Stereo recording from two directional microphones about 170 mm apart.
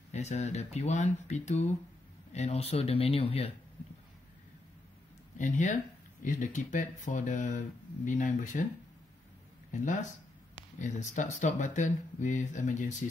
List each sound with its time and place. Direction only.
0.1 s speech: 40° left (ahead or behind)
5.4 s speech: 45° left (ahead or behind)
10.8 s speech: 45° left (ahead or behind)